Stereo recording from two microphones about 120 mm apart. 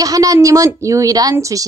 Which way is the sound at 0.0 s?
30° right (ahead or behind).